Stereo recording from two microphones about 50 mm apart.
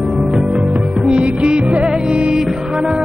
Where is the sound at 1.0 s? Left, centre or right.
Right.